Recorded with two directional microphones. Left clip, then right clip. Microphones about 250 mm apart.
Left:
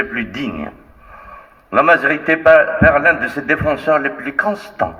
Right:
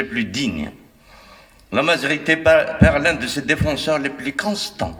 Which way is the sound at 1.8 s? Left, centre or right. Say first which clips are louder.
Left 6 dB; right.